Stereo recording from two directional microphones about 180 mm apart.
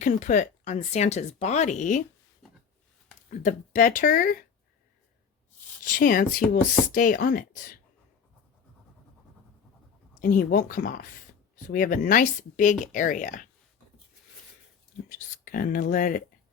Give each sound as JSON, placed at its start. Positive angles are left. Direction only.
{"t": 0.0, "sound": "speech", "side_deg": 45}
{"t": 3.2, "sound": "speech", "side_deg": 45}
{"t": 5.8, "sound": "speech", "side_deg": 50}
{"t": 10.2, "sound": "speech", "side_deg": 45}
{"t": 15.5, "sound": "speech", "side_deg": 50}